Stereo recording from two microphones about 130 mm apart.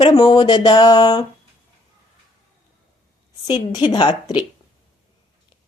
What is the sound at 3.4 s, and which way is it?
Speech, 35° left (ahead or behind).